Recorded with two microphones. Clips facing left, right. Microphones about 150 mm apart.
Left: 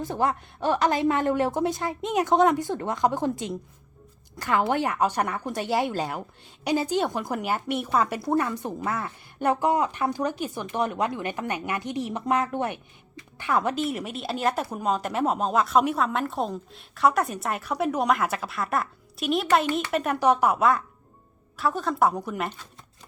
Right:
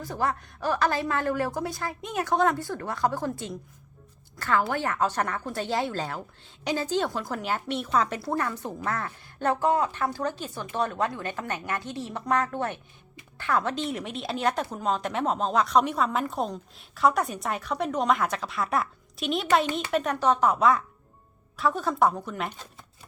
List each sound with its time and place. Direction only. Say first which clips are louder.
0.0 s a woman's voice: left 3 dB; 20° left (ahead or behind); by 22.1 s centre (ahead or behind)
22.1 s a woman's voice: left 4 dB; 10° left (ahead or behind)